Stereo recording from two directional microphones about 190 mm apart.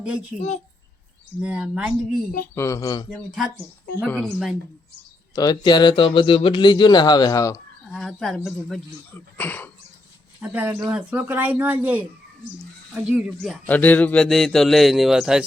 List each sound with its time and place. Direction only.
0.3 s speech: 35° left (ahead or behind)
1.4 s speech: 5° right (ahead or behind)
2.6 s speech: 15° left (ahead or behind)
3.1 s speech: centre (ahead or behind)
5.3 s speech: 20° left (ahead or behind)
7.9 s speech: centre (ahead or behind)
10.4 s speech: 10° right (ahead or behind)